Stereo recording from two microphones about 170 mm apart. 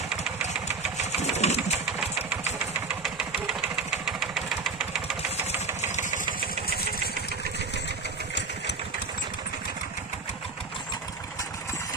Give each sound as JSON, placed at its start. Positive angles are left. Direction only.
{"t": 0.1, "sound": "engine", "side_deg": -5}
{"t": 0.9, "sound": "sewing machine", "side_deg": 40}
{"t": 2.0, "sound": "engine", "side_deg": -5}